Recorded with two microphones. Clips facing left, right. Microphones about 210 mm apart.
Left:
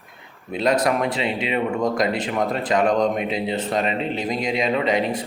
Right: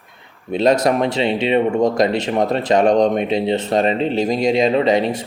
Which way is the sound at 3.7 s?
40° right (ahead or behind).